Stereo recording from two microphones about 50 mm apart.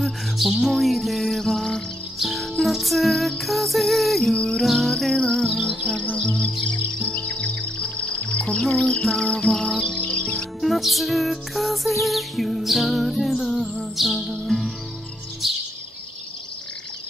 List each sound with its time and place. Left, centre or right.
0.0 s music: centre
4.4 s music: centre
4.6 s cricket: centre
5.1 s cricket: centre
5.9 s music: left
7.1 s music: left
10.6 s music: centre
15.4 s bird vocalization: centre